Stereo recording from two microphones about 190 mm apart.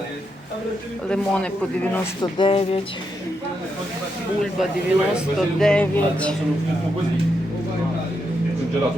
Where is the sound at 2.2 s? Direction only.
25° left (ahead or behind).